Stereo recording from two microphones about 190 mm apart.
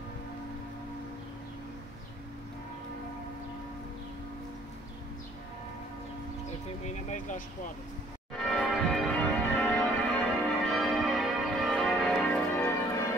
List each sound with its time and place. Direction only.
6.8 s vehicle: 40° left (ahead or behind)
8.5 s change ringing: centre (ahead or behind)